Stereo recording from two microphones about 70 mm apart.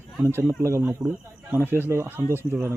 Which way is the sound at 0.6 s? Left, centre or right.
Right.